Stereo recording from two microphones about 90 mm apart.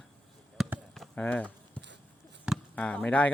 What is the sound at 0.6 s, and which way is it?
Basketball bounce, centre (ahead or behind).